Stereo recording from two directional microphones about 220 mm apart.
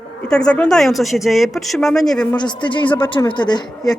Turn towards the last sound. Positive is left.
turn(degrees=20)  # may be behind; listen again after turning